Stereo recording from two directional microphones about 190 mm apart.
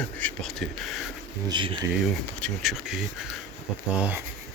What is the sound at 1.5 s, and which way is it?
Speech, 25° right (ahead or behind).